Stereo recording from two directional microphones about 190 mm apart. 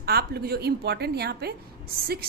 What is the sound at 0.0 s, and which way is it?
A woman's voice, 55° right (ahead or behind).